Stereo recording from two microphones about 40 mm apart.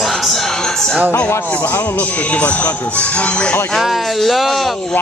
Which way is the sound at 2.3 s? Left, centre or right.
Left.